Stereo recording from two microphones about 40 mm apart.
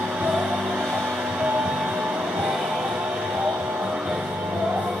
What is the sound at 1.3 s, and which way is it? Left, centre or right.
Music, right.